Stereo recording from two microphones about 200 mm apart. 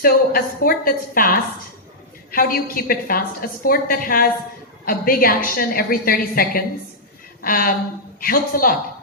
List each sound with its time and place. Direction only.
0.0 s a woman's voice: 50° left (ahead or behind)
2.3 s a woman's voice: 45° left (ahead or behind)